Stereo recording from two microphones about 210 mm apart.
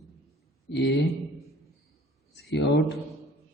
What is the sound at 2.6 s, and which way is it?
Mantra, 55° left (ahead or behind).